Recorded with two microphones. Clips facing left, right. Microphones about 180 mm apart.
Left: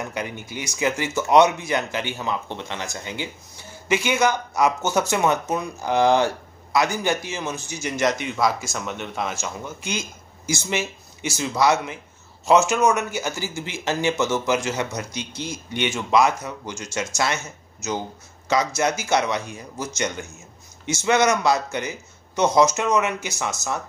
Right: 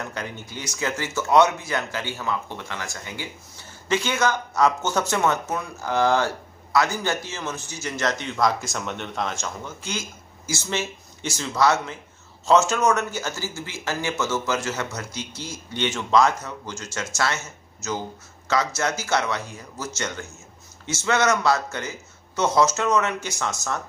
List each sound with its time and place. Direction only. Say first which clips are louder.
0.0 s speech: left 3 dB; 15° left (ahead or behind)
9.8 s speech: left 2 dB; 15° left (ahead or behind)